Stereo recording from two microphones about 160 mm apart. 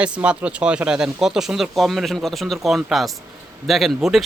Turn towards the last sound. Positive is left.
turn(degrees=0)  # may be behind; listen again after turning